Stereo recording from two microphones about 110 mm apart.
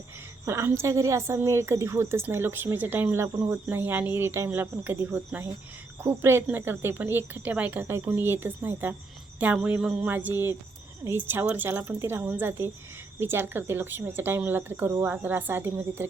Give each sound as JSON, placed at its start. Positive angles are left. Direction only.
{"t": 0.4, "sound": "a woman's voice", "side_deg": -25}
{"t": 9.4, "sound": "a sound", "side_deg": -15}
{"t": 10.1, "sound": "a woman's voice", "side_deg": -15}